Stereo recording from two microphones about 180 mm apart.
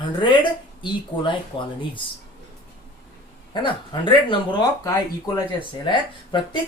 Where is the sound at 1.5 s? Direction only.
25° left (ahead or behind).